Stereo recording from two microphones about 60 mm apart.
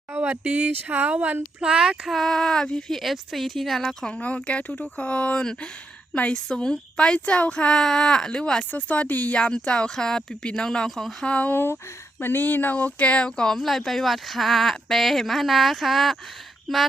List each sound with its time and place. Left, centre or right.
0.2 s speech: right
1.7 s child singing: centre
2.0 s speech: centre
8.7 s speech: left; by 11.3 s centre
11.3 s speech: left
11.5 s speech: left; by 16.8 s centre